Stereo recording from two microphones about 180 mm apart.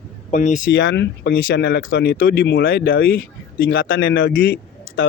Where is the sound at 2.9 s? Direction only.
90° left.